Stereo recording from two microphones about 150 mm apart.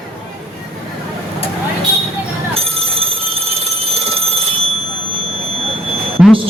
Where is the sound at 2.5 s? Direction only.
40° right (ahead or behind).